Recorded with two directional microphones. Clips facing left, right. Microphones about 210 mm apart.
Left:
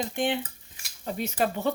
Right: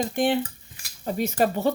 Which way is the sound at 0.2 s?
40° right (ahead or behind).